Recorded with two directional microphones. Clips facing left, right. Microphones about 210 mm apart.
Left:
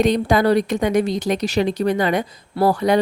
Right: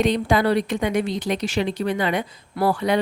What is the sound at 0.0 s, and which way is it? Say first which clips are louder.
A woman's voice: left 3 dB; 40° left (ahead or behind).